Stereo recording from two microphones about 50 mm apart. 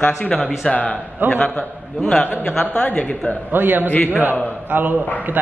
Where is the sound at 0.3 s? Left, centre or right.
Left.